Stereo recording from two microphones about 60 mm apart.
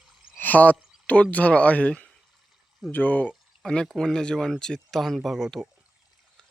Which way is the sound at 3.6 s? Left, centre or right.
Centre.